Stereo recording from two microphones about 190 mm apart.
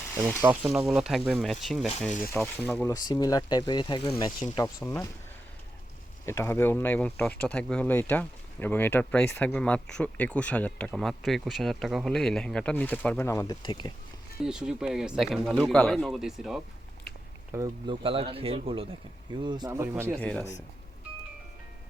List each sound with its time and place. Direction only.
0.4 s speech: 5° right (ahead or behind)
2.9 s speech: 20° left (ahead or behind)
6.2 s speech: 15° left (ahead or behind)
14.4 s speech: 5° right (ahead or behind)
17.5 s speech: 15° right (ahead or behind)
18.0 s speech: 30° right (ahead or behind); by 20.1 s 10° right (ahead or behind)
20.1 s speech: 5° left (ahead or behind)